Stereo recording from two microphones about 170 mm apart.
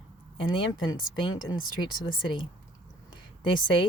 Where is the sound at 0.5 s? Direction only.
25° left (ahead or behind).